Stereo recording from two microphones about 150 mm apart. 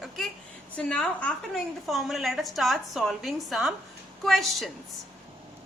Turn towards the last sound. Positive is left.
turn(degrees=0)  # may be behind; listen again after turning